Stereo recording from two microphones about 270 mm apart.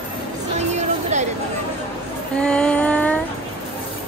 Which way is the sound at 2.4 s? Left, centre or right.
Centre.